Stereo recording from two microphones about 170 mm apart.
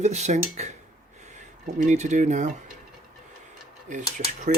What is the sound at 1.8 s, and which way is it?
Speech, 45° right (ahead or behind).